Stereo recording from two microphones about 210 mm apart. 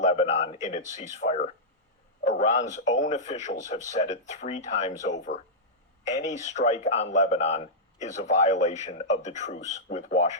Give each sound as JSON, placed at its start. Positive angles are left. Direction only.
{"t": 0.0, "sound": "a man's voice", "side_deg": 30}